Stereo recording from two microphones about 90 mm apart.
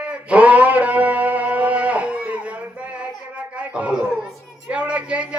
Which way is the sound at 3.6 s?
15° right (ahead or behind).